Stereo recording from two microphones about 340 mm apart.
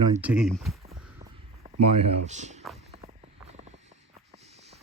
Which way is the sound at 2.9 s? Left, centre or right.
Centre.